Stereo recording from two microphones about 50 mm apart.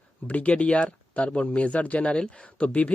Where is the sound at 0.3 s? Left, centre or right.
Left.